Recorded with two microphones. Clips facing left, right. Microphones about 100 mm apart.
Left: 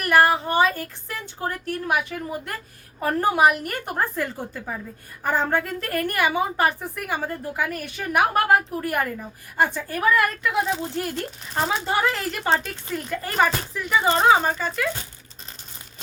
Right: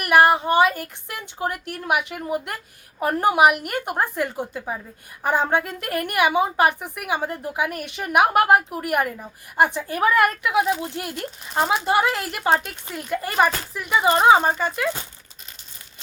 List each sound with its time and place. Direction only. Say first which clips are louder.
0.0 s a woman's voice: right 2 dB; 15° right (ahead or behind)
10.5 s a woman's voice: right 3 dB; 15° right (ahead or behind)
12.4 s speech: right 3 dB; 5° right (ahead or behind)
12.6 s a woman's voice: left 2 dB; 15° right (ahead or behind)
14.3 s speech: right 3 dB; 25° right (ahead or behind)